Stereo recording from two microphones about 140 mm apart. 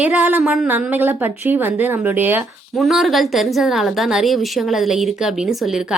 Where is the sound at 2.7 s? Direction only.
Centre (ahead or behind).